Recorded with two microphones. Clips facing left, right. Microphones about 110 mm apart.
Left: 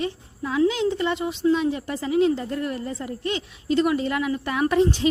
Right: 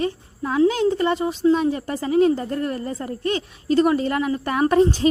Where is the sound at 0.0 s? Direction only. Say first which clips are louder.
Right 3 dB; 45° right (ahead or behind).